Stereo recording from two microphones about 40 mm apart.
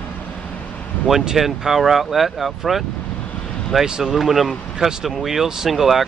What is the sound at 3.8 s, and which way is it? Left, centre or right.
Speech, centre.